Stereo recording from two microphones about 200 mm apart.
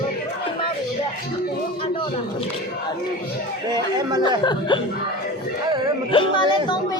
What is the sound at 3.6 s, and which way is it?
Speech, 20° right (ahead or behind).